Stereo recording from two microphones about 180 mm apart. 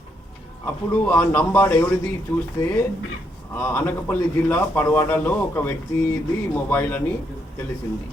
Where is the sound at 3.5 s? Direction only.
10° left (ahead or behind).